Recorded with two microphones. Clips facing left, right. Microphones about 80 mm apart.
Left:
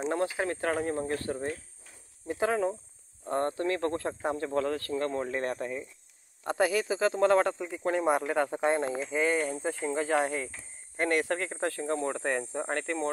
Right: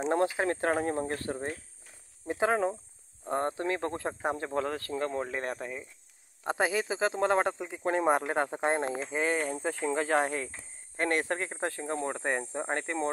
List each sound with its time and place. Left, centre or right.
0.0 s speech: right; by 5.9 s centre
6.4 s speech: right